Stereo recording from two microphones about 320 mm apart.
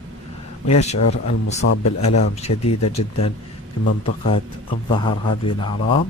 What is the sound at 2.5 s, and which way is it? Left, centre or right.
Speech, left.